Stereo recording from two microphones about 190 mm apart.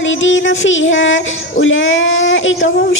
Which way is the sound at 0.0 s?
80° left.